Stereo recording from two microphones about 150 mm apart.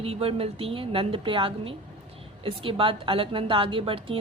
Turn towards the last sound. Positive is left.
turn(degrees=-35)  # may be behind; listen again after turning